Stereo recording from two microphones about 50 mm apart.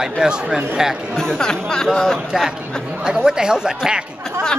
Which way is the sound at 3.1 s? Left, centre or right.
Centre.